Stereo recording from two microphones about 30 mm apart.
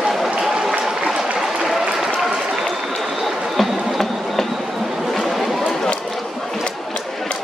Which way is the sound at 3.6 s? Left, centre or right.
Centre.